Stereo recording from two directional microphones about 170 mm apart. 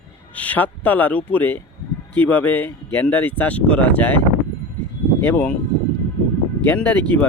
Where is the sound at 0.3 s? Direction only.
10° left (ahead or behind).